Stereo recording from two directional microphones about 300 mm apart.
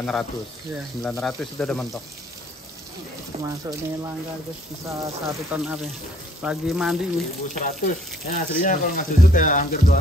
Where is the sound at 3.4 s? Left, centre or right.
Centre.